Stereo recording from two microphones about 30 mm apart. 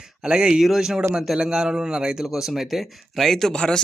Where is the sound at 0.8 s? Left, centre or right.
Centre.